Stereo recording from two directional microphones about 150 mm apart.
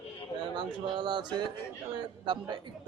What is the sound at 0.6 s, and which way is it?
Speech, 30° right (ahead or behind).